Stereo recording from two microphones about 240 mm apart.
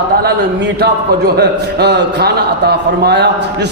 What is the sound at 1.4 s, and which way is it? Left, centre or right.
A man's voice, right.